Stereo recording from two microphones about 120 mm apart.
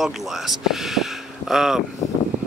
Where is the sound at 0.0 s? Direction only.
Centre (ahead or behind).